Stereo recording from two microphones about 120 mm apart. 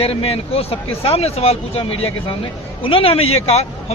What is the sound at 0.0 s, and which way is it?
Speech, 55° left (ahead or behind).